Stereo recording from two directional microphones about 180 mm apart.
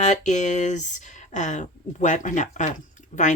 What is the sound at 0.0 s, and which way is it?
Speech, 40° left (ahead or behind).